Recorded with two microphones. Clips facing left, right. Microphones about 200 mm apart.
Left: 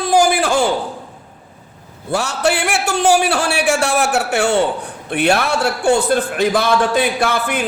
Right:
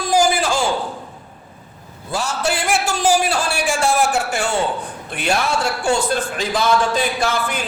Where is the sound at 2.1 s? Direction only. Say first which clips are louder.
Left 4 dB; 65° left (ahead or behind).